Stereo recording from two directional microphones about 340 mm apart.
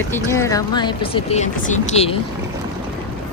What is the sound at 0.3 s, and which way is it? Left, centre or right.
Speech, centre.